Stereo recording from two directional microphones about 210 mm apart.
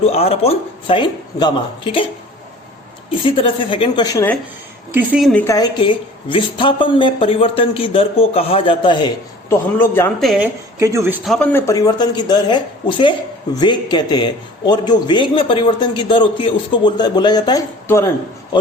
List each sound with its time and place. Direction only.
0.0 s a man's voice: 30° left (ahead or behind)
3.1 s a man's voice: 25° left (ahead or behind)
4.9 s speech: 5° right (ahead or behind)
5.5 s a man's voice: 20° left (ahead or behind)
9.7 s speech: 10° left (ahead or behind)
10.8 s a man's voice: 15° right (ahead or behind)
11.3 s a man's voice: 10° left (ahead or behind)